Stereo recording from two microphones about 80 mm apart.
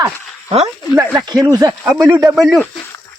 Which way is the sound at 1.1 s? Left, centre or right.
Right.